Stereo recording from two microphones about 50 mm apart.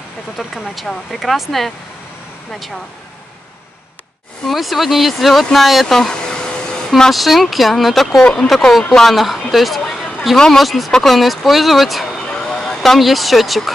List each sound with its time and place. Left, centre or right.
0.4 s speech: centre
4.5 s speech: centre
7.1 s speech: centre
8.2 s speech: centre
9.1 s a woman's voice: centre
12.2 s vehicle: centre